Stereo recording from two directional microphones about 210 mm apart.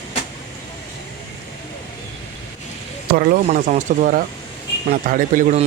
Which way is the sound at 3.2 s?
40° right (ahead or behind).